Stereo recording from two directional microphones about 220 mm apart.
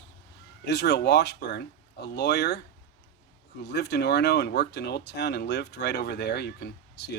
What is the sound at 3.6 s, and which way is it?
Speech, 50° left (ahead or behind).